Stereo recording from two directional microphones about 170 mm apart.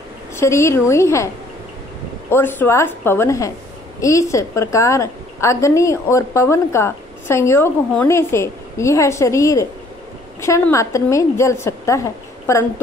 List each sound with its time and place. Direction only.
0.4 s a woman's voice: 15° left (ahead or behind)